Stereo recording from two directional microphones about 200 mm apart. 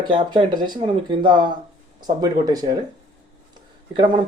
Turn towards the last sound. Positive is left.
turn(degrees=-25)  # may be behind; listen again after turning